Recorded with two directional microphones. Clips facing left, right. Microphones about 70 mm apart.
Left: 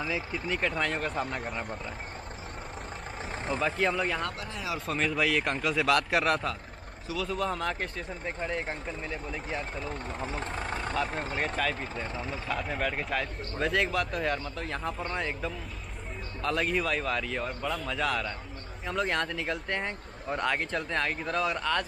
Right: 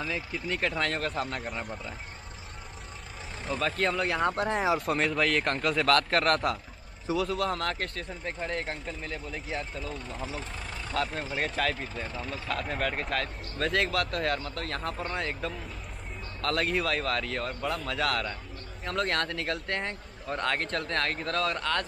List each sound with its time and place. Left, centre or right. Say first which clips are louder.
0.0 s speech: left 1 dB; centre
3.5 s speech: even; centre
4.4 s speech: right 11 dB; right
4.8 s speech: right 1 dB; centre
9.8 s speech: left 1 dB; left
11.3 s speech: right 1 dB; centre
12.1 s speech: left 1 dB; left
12.4 s speech: right 1 dB; centre